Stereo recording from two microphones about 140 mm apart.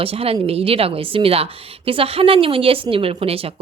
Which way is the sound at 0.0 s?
45° right (ahead or behind).